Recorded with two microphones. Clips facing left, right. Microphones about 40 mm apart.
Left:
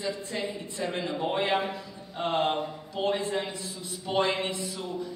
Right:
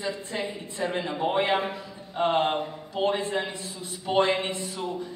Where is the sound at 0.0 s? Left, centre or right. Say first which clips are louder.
Right 1 dB; right.